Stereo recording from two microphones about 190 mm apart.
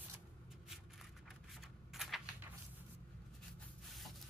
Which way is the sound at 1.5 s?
Centre (ahead or behind).